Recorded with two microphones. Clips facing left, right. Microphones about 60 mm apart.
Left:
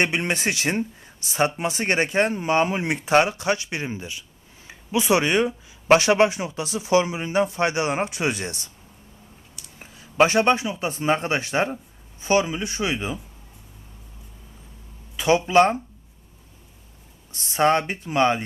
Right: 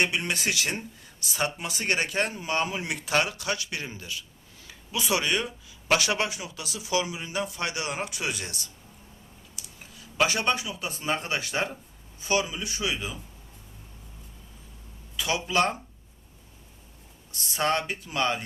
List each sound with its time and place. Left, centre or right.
0.0 s speech: left
9.7 s speech: left
15.1 s speech: left
17.3 s speech: left